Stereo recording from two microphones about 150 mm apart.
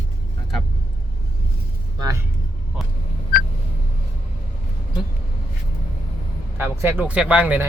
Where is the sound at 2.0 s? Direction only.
20° right (ahead or behind).